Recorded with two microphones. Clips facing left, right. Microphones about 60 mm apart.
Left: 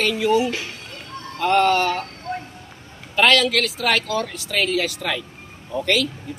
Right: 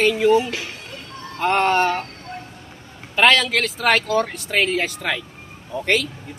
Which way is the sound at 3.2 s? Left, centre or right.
Right.